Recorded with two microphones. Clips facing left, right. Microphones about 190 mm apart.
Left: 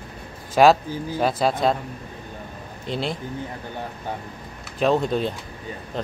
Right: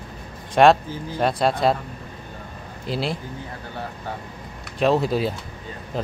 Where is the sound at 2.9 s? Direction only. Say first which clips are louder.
Right 1 dB; centre (ahead or behind).